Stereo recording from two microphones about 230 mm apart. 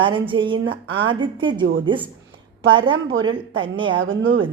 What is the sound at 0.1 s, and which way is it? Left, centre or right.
A woman's voice, right.